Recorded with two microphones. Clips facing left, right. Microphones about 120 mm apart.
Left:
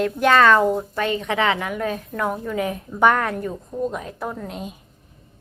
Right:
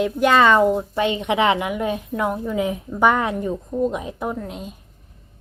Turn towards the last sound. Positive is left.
turn(degrees=0)  # may be behind; listen again after turning